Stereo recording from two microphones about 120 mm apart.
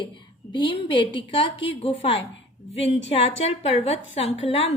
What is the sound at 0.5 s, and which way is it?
A woman's voice, 40° left (ahead or behind).